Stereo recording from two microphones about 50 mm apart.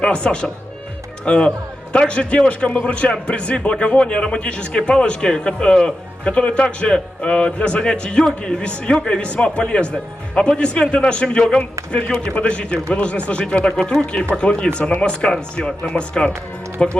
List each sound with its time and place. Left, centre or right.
0.0 s speech: centre